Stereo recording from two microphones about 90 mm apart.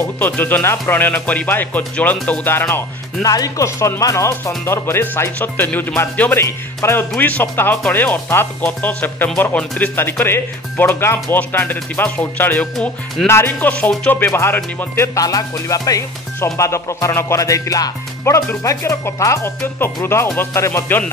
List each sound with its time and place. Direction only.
0.2 s speech: 20° left (ahead or behind)
3.3 s speech: 40° left (ahead or behind); by 6.4 s 20° left (ahead or behind)
6.4 s speech: 30° left (ahead or behind)
7.2 s speech: 20° left (ahead or behind)
15.1 s speech: 40° left (ahead or behind)